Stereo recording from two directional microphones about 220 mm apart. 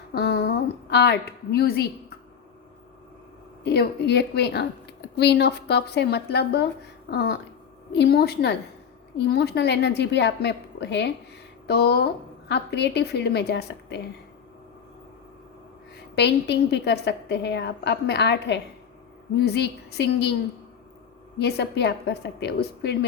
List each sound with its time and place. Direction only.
0.1 s a sound: 50° left (ahead or behind)
3.6 s a woman's voice: 50° left (ahead or behind)
16.1 s a woman's voice: 50° left (ahead or behind)
21.3 s a woman's voice: 50° left (ahead or behind)